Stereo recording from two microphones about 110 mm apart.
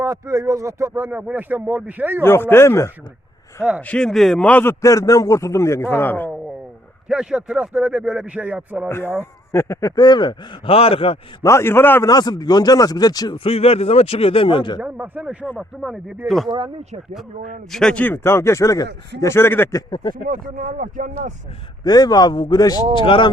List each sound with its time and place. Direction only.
0.0 s speech: 25° right (ahead or behind)
2.2 s a man's voice: 20° left (ahead or behind)
3.8 s a man's voice: 10° left (ahead or behind)
7.1 s speech: 5° right (ahead or behind)
9.5 s a man's voice: 25° left (ahead or behind); by 11.2 s 60° left (ahead or behind)
11.4 s a man's voice: 25° left (ahead or behind)
12.0 s a man's voice: 35° left (ahead or behind)
13.4 s a man's voice: 65° left (ahead or behind); by 14.8 s 50° left (ahead or behind)
14.8 s speech: 10° right (ahead or behind)
17.7 s speech: 5° left (ahead or behind)
18.0 s a man's voice: 20° left (ahead or behind)
19.7 s a man's voice: 40° left (ahead or behind)
21.8 s a man's voice: 35° left (ahead or behind)
23.0 s speech: 50° left (ahead or behind)